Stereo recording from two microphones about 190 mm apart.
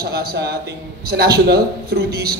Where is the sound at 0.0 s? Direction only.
55° right (ahead or behind).